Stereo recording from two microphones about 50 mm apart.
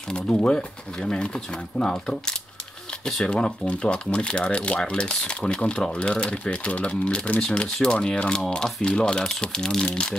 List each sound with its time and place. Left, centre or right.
0.1 s speech: left